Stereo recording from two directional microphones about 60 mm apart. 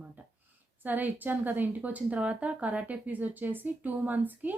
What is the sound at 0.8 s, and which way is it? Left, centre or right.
A woman's voice, right.